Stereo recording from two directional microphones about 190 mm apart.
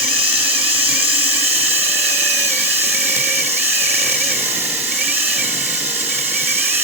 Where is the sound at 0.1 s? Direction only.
30° right (ahead or behind).